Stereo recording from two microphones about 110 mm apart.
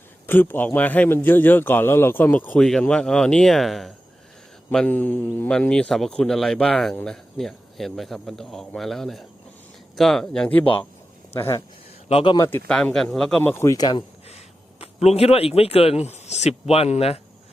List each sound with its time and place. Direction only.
0.3 s a man's voice: 20° left (ahead or behind)
2.6 s a man's voice: 5° left (ahead or behind)
11.3 s speech: 25° left (ahead or behind)
12.6 s a man's voice: 5° left (ahead or behind)
13.4 s speech: 20° left (ahead or behind)
13.7 s speech: 40° left (ahead or behind)
14.3 s speech: 70° left (ahead or behind)